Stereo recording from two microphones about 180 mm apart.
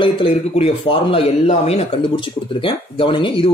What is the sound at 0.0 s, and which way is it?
Speech, 35° left (ahead or behind).